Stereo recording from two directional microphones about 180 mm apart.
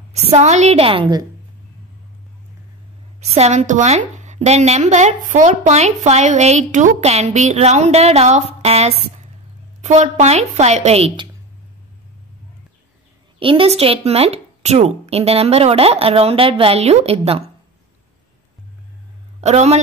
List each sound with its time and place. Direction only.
0.1 s a woman's voice: 40° right (ahead or behind)
3.3 s a woman's voice: 40° right (ahead or behind)
13.4 s a woman's voice: 30° right (ahead or behind)
19.4 s a woman's voice: 40° right (ahead or behind)